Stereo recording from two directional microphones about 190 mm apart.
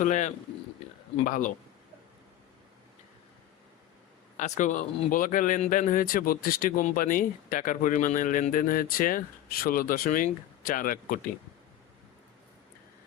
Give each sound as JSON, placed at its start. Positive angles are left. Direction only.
{"t": 0.0, "sound": "a man's voice", "side_deg": 40}
{"t": 4.4, "sound": "speech", "side_deg": 40}